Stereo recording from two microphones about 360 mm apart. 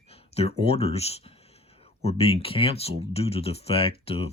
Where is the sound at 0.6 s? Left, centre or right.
Centre.